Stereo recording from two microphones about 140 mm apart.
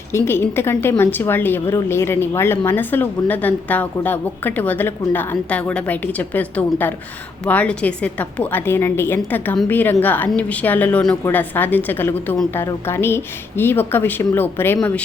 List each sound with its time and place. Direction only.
0.1 s speech: 15° left (ahead or behind)